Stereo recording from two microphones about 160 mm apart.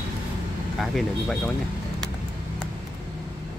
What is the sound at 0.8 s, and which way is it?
Speech, centre (ahead or behind).